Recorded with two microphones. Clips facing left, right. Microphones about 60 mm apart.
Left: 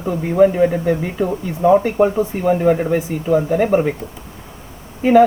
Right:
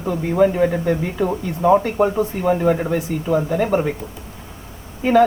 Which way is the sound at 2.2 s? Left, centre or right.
Centre.